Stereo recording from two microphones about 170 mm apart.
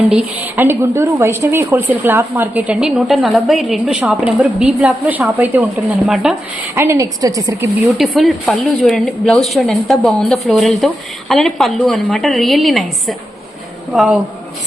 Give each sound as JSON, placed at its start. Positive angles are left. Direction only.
{"t": 0.1, "sound": "a woman's voice", "side_deg": -10}
{"t": 6.7, "sound": "a woman's voice", "side_deg": -15}
{"t": 7.9, "sound": "a woman's voice", "side_deg": 0}